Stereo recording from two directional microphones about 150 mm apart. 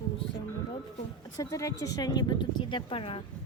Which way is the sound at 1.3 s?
20° left (ahead or behind).